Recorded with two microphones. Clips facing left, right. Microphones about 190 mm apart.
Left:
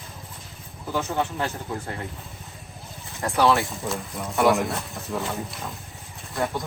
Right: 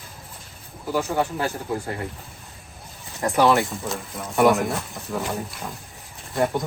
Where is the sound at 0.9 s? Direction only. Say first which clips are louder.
Right 2 dB; 5° right (ahead or behind).